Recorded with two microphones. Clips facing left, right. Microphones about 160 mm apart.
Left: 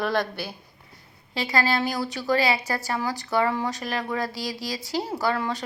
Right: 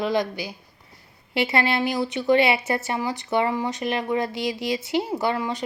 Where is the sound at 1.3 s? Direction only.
25° right (ahead or behind).